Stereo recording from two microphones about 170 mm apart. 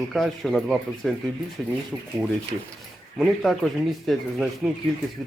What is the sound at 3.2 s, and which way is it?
Speech, centre (ahead or behind).